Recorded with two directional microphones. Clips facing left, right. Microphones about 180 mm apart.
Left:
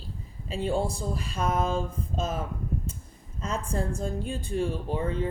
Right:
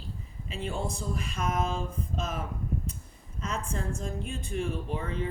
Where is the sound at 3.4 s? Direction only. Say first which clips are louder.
Left 4 dB; 35° left (ahead or behind).